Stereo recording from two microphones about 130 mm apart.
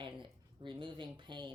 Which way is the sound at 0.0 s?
40° right (ahead or behind).